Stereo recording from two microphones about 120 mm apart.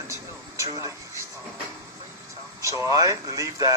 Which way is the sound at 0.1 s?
25° right (ahead or behind).